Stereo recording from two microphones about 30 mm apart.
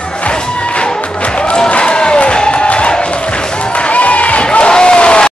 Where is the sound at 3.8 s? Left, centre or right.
Left.